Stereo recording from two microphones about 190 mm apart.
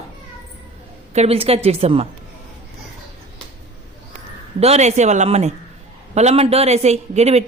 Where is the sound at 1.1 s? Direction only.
35° right (ahead or behind).